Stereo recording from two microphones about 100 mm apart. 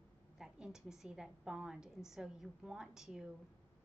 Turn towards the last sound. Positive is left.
turn(degrees=-5)  # may be behind; listen again after turning